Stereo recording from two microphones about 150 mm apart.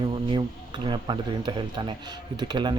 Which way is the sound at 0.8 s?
30° right (ahead or behind).